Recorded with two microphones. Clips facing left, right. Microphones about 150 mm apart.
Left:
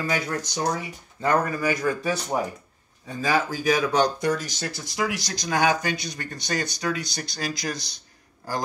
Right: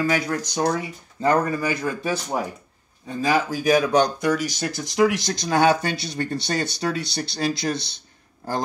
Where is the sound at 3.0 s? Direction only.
20° right (ahead or behind).